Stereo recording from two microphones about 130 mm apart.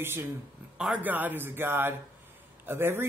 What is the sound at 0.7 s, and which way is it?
Speech, 5° right (ahead or behind).